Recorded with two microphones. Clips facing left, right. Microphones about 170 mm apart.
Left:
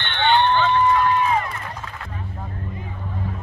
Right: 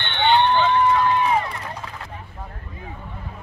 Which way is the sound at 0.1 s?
20° right (ahead or behind).